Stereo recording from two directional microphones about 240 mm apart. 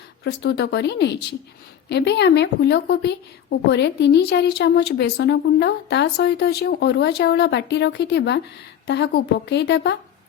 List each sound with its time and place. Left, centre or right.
0.3 s a woman's voice: left